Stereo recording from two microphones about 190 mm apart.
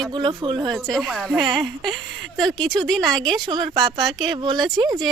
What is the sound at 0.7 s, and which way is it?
Speech, centre (ahead or behind).